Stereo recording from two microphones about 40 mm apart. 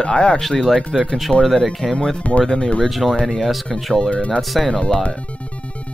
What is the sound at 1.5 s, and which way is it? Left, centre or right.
Speech, centre.